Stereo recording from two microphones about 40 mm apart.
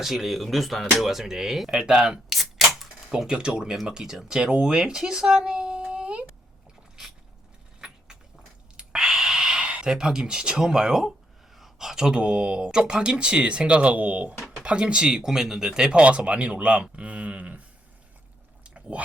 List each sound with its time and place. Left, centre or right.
0.0 s speech: centre
2.3 s typewriter: centre
3.2 s speech: right
4.8 s a sound: centre
7.8 s keys jangling: centre
8.7 s a sound: right
11.5 s speech: centre; by 14.3 s right
14.5 s speech: right
15.0 s speech: centre
15.9 s speech: right
18.6 s a sound: right